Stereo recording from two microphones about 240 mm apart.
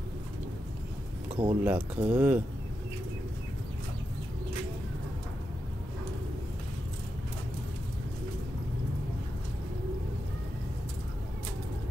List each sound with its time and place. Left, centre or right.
1.3 s speech: right
1.6 s speech: centre